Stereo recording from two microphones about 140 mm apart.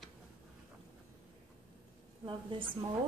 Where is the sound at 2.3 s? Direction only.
35° right (ahead or behind).